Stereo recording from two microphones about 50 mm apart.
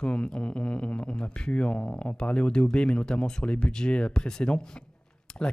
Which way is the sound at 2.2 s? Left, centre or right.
Centre.